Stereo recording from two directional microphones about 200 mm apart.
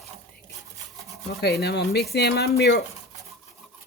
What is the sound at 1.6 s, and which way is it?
Speech, 55° left (ahead or behind).